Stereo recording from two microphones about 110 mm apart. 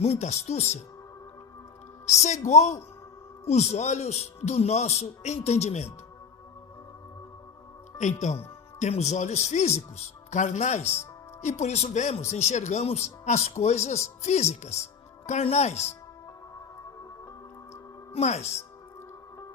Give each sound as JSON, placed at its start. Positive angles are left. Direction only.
{"t": 0.0, "sound": "speech", "side_deg": 85}
{"t": 2.0, "sound": "a man's voice", "side_deg": 90}
{"t": 7.9, "sound": "a man's voice", "side_deg": 90}
{"t": 15.3, "sound": "a man's voice", "side_deg": 90}
{"t": 18.1, "sound": "a man's voice", "side_deg": 80}